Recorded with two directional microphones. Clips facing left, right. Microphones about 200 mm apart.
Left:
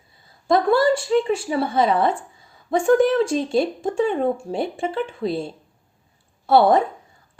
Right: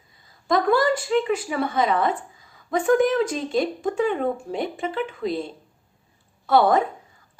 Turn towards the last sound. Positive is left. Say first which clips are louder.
# left 3 dB
turn(degrees=30)  # may be behind; listen again after turning